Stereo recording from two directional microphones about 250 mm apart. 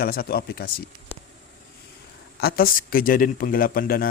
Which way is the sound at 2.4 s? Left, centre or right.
Left.